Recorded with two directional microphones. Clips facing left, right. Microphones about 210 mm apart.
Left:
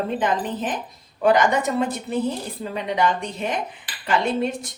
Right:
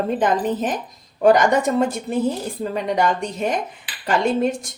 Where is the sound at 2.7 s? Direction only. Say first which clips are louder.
Right 1 dB; 45° right (ahead or behind).